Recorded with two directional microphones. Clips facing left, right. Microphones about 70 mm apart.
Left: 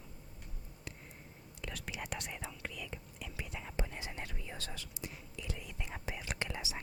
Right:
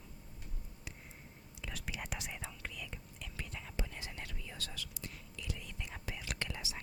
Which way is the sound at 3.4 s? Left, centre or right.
Centre.